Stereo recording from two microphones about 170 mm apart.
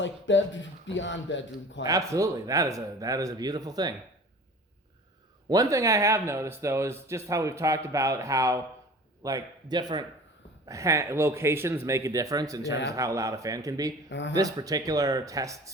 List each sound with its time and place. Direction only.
0.0 s speech: 90° left
1.8 s speech: 20° right (ahead or behind)
5.5 s speech: 20° right (ahead or behind)
14.1 s speech: 90° left
14.3 s speech: 20° right (ahead or behind)